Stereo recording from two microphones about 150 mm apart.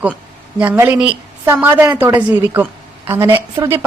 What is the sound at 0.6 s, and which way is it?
A woman's voice, 10° right (ahead or behind).